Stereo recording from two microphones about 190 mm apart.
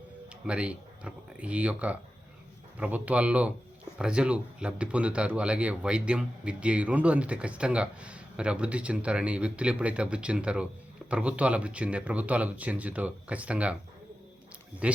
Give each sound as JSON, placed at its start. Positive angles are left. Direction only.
{"t": 0.4, "sound": "speech", "side_deg": -5}
{"t": 14.8, "sound": "speech", "side_deg": -5}